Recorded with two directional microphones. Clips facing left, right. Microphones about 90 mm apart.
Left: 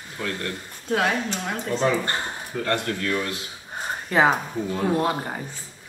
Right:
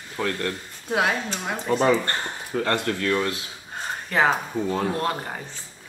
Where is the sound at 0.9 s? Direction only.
10° right (ahead or behind).